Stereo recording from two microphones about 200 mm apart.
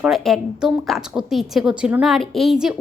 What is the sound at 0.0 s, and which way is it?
Speech, centre (ahead or behind).